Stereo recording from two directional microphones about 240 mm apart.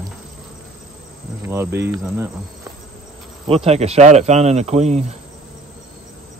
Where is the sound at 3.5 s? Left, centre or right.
Right.